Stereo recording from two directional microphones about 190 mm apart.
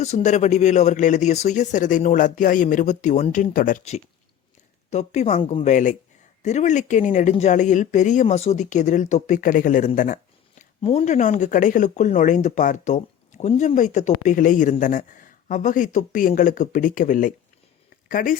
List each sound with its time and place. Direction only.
0.0 s a man's voice: 35° left (ahead or behind)